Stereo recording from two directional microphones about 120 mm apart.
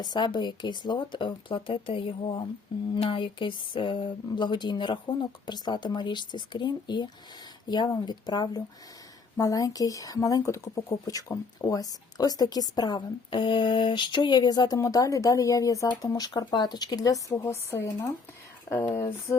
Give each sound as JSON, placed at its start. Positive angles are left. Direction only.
{"t": 0.0, "sound": "speech", "side_deg": 40}
{"t": 19.3, "sound": "music", "side_deg": 25}